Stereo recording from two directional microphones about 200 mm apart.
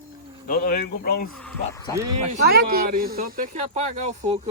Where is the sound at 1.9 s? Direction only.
20° left (ahead or behind).